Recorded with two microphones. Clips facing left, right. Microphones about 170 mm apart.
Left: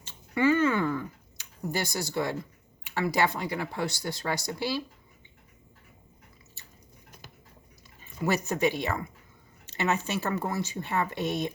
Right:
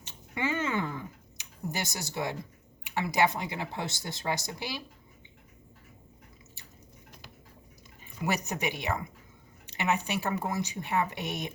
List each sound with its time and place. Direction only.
0.0 s a sound: 20° right (ahead or behind)
2.8 s speech: 20° right (ahead or behind)
8.2 s speech: 15° right (ahead or behind)